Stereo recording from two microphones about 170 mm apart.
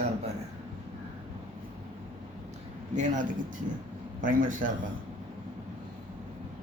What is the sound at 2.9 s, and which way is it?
Speech, 45° right (ahead or behind).